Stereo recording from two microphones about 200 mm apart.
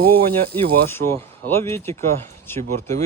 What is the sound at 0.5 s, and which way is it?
Speech, 10° left (ahead or behind).